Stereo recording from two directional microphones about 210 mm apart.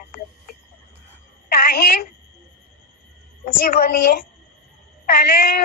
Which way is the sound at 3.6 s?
45° left (ahead or behind).